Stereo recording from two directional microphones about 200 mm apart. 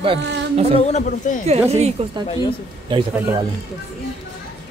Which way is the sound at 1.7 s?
30° right (ahead or behind).